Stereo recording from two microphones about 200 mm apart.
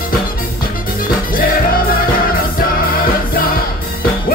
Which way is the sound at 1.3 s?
45° left (ahead or behind).